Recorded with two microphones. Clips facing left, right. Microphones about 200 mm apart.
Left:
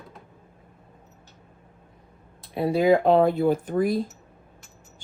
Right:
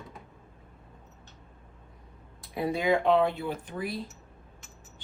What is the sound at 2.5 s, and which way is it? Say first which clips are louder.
Speech: left 7 dB; 30° left (ahead or behind).